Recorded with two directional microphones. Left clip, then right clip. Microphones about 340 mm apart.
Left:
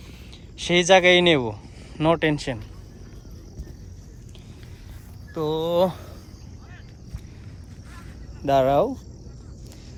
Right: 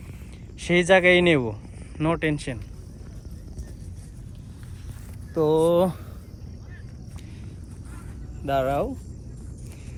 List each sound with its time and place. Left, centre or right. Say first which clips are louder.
0.6 s speech: left 2 dB; centre
5.3 s speech: right 4 dB; centre
8.4 s speech: left 5 dB; left